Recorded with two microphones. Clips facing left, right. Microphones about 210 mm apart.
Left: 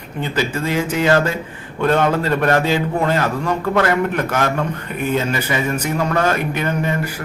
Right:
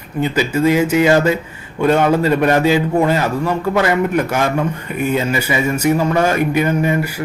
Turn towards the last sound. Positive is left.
turn(degrees=-10)  # may be behind; listen again after turning